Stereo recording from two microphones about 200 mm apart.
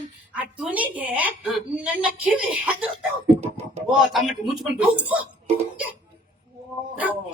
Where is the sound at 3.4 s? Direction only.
35° right (ahead or behind).